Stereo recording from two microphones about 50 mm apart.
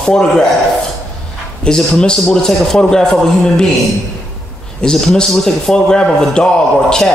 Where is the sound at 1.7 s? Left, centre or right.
Centre.